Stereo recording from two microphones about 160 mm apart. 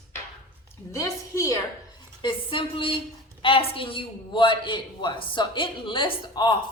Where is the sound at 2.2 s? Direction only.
30° left (ahead or behind).